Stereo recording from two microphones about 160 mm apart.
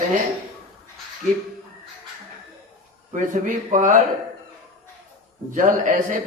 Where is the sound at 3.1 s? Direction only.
55° right (ahead or behind).